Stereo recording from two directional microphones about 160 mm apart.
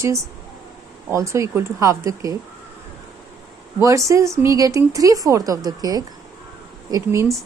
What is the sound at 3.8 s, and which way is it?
A woman's voice, 20° right (ahead or behind).